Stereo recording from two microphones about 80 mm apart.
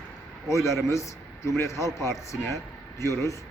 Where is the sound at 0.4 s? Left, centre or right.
Left.